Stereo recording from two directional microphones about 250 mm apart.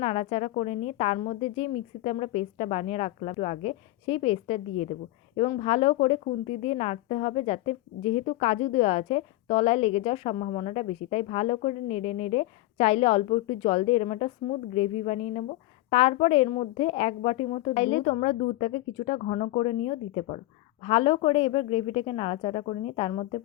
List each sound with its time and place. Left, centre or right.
0.0 s a woman's voice: left